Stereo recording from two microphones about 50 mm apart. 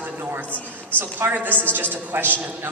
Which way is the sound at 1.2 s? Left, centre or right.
Right.